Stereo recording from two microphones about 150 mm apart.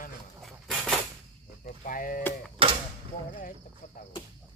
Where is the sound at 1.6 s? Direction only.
65° left (ahead or behind).